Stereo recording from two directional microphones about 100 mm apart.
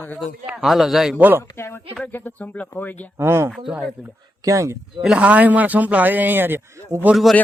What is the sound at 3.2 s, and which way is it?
Speech, 25° right (ahead or behind).